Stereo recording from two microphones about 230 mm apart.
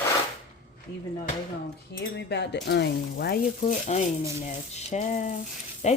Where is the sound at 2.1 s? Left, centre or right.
Left.